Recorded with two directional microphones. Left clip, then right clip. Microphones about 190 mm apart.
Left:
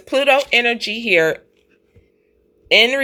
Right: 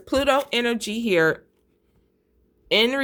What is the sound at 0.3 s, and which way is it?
Speech, 40° right (ahead or behind).